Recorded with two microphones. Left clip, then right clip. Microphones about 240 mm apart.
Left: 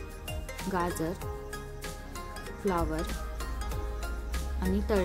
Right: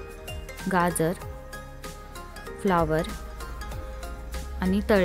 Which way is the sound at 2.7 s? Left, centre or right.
Right.